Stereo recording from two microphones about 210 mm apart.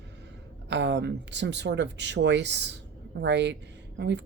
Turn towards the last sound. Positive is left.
turn(degrees=-55)  # may be behind; listen again after turning